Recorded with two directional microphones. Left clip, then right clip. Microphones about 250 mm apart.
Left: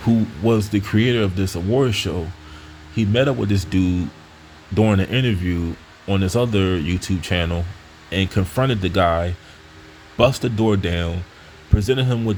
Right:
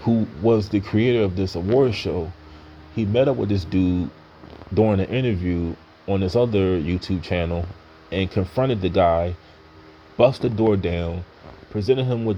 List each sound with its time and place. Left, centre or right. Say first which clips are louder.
0.0 s speech: left 1 dB; left